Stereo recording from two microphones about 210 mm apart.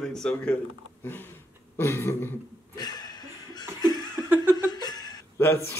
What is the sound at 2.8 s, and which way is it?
Chuckle, 20° left (ahead or behind).